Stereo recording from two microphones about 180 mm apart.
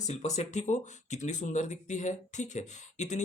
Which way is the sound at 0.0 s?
40° left (ahead or behind).